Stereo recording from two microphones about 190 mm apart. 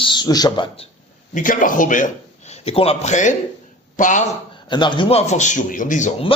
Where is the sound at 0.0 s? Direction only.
25° left (ahead or behind).